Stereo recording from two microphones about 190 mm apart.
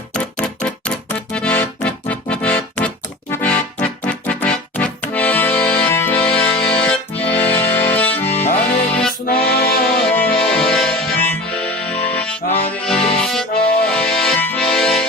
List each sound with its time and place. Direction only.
0.1 s music: 5° left (ahead or behind)
8.9 s accordion: 5° left (ahead or behind)
9.4 s music: 5° left (ahead or behind)
12.5 s accordion: 30° left (ahead or behind)
12.8 s accordion: 5° left (ahead or behind)